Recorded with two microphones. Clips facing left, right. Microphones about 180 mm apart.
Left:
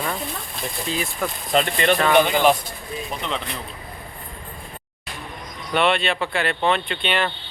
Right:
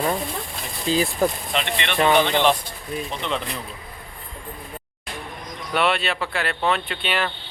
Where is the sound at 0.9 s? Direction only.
35° right (ahead or behind).